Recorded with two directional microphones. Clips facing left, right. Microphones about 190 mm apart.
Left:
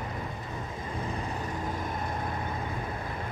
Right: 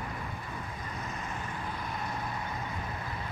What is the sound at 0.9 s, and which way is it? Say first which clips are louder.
Vehicle: left 7 dB; 30° left (ahead or behind).